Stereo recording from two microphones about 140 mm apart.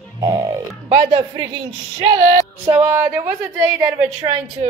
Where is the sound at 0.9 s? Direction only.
35° right (ahead or behind).